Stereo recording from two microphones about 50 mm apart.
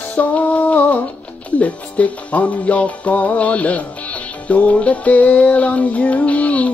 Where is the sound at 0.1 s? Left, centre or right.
Left.